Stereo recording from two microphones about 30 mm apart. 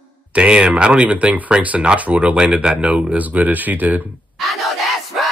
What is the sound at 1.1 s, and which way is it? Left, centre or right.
Speech, right.